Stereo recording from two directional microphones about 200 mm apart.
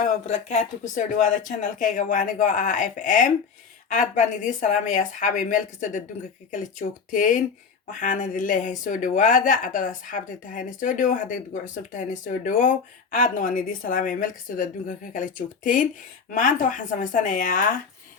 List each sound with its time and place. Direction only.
0.0 s a woman's voice: 40° left (ahead or behind)